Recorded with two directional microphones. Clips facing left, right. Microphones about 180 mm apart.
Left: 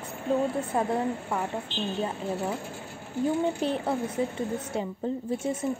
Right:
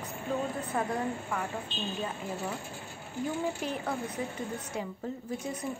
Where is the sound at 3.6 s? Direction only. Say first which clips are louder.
Left 6 dB; 30° left (ahead or behind).